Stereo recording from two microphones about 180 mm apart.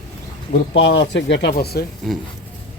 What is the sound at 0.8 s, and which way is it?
Speech, 85° left.